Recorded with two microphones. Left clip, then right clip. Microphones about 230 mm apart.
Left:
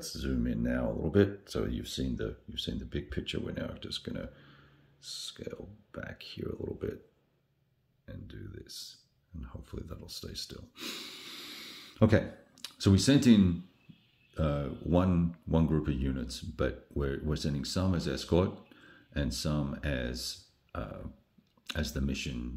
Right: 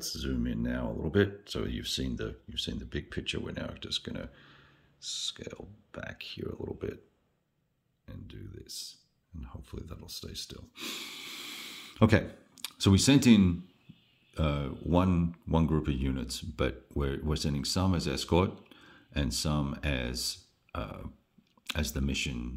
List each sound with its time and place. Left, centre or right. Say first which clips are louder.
0.1 s speech: left 3 dB; centre
8.0 s speech: left 1 dB; centre